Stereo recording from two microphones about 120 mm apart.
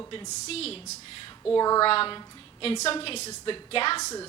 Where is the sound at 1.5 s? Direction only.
30° left (ahead or behind).